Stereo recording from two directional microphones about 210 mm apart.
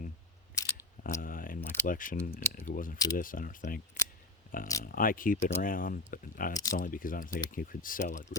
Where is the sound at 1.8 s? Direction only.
40° left (ahead or behind).